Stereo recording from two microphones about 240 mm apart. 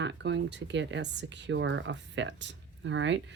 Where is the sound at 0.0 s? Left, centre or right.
Right.